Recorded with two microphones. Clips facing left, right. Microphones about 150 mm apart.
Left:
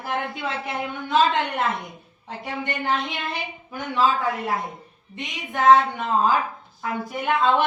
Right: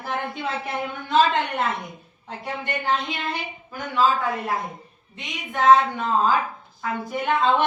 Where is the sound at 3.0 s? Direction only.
Centre (ahead or behind).